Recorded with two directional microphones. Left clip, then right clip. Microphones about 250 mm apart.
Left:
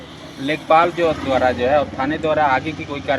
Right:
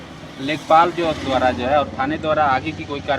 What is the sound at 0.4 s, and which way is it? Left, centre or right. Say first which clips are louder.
Speech: even; centre.